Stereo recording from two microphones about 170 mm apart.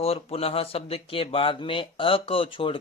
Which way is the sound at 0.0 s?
35° left (ahead or behind).